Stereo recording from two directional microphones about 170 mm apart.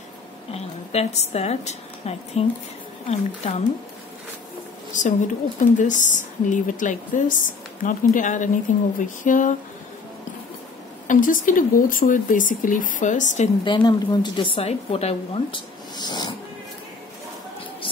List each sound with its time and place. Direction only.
0.5 s a woman's voice: 40° left (ahead or behind)
4.9 s speech: 50° left (ahead or behind)
11.1 s speech: 50° left (ahead or behind)
13.7 s a woman's voice: 25° left (ahead or behind)
16.0 s speech: 25° left (ahead or behind)